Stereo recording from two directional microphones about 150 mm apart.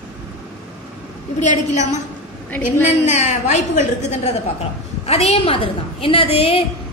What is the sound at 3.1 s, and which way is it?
A woman's voice, 50° left (ahead or behind).